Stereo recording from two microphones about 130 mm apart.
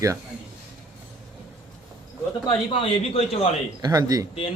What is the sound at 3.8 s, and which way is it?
Speech, 30° right (ahead or behind).